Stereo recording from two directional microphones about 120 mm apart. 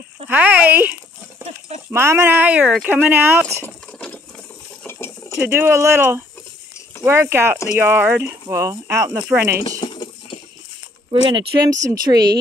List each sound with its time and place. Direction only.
0.3 s speech: 15° right (ahead or behind)
4.8 s stir: 20° left (ahead or behind)
5.4 s speech: 15° right (ahead or behind)
9.8 s a sound: 40° left (ahead or behind)
11.1 s speech: 45° right (ahead or behind)
11.8 s a woman's voice: 35° right (ahead or behind)